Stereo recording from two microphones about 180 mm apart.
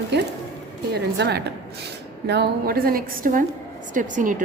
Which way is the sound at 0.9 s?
65° right (ahead or behind).